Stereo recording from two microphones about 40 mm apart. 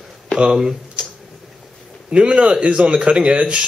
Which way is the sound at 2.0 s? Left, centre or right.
Right.